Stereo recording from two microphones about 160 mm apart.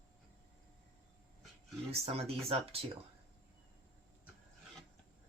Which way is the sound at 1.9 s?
40° right (ahead or behind).